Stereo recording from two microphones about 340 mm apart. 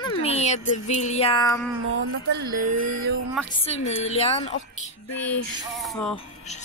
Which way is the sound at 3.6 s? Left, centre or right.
Centre.